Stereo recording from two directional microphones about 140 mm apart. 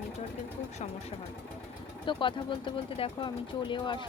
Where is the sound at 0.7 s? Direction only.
55° left (ahead or behind).